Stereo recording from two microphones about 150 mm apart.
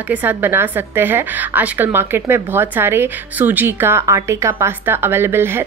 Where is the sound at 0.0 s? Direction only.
10° right (ahead or behind).